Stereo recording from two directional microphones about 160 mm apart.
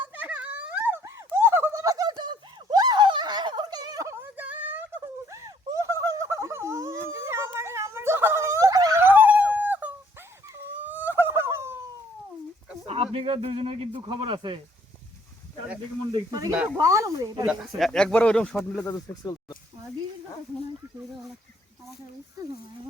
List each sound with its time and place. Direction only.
0.0 s a sound: 10° right (ahead or behind)
12.9 s speech: 40° right (ahead or behind)
16.1 s speech: 25° right (ahead or behind)
17.4 s speech: centre (ahead or behind)
18.9 s speech: 25° left (ahead or behind)